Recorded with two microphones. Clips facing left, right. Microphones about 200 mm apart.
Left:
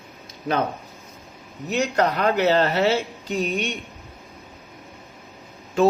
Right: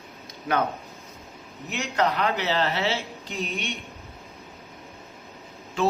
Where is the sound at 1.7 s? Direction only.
40° left (ahead or behind).